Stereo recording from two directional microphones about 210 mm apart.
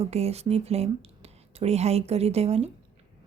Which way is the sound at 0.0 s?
30° right (ahead or behind).